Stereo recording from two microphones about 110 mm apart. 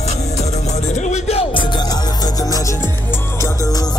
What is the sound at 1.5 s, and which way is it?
Music, 40° left (ahead or behind).